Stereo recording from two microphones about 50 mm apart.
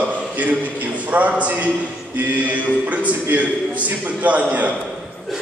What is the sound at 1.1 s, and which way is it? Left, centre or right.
A man's voice, right.